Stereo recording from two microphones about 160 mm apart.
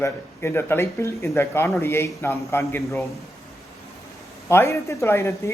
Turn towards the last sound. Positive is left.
turn(degrees=15)  # may be behind; listen again after turning